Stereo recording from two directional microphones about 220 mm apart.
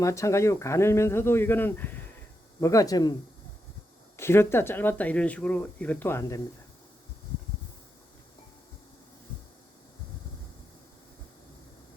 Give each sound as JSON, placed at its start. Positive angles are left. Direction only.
{"t": 0.0, "sound": "speech", "side_deg": 15}
{"t": 4.2, "sound": "speech", "side_deg": 10}